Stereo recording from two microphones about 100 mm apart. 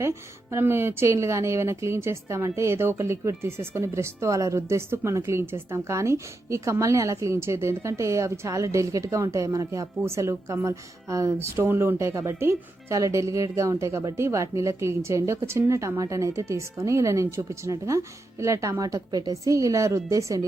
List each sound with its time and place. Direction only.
0.5 s a woman's voice: 25° right (ahead or behind)